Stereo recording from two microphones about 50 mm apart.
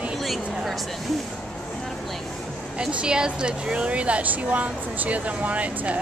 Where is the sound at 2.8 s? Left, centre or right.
Centre.